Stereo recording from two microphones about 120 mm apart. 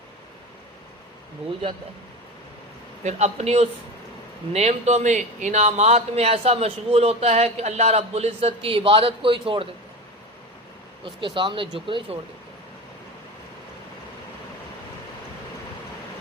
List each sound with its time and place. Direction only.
1.4 s a man's voice: 55° right (ahead or behind)
3.0 s a man's voice: 70° right (ahead or behind); by 9.6 s 45° right (ahead or behind)
11.0 s speech: 45° right (ahead or behind)